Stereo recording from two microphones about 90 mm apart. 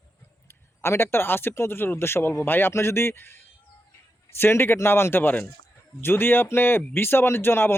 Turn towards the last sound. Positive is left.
turn(degrees=25)  # may be behind; listen again after turning